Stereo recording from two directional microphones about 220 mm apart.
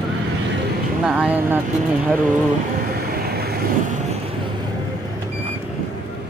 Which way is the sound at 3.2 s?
45° right (ahead or behind).